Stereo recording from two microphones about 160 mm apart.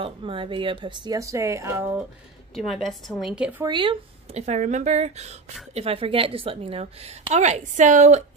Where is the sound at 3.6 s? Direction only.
30° right (ahead or behind).